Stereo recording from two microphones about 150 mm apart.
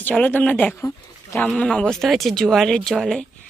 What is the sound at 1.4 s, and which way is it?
Speech, 5° left (ahead or behind).